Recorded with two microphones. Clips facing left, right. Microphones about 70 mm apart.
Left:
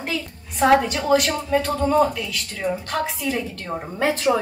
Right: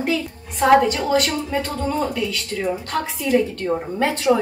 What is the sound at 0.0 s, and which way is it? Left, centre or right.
A woman's voice, centre.